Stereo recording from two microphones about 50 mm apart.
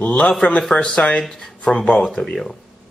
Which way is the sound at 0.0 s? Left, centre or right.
Left.